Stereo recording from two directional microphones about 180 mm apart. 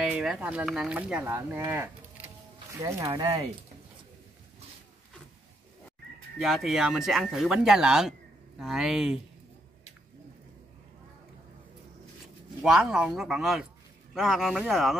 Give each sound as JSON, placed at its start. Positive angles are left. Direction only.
{"t": 0.0, "sound": "speech", "side_deg": 0}
{"t": 1.7, "sound": "a sound", "side_deg": -10}
{"t": 2.8, "sound": "speech", "side_deg": -20}
{"t": 6.3, "sound": "speech", "side_deg": 0}
{"t": 12.6, "sound": "speech", "side_deg": -5}